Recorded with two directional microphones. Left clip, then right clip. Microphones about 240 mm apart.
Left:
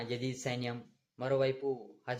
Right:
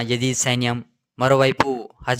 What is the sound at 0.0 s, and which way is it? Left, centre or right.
Speech, right.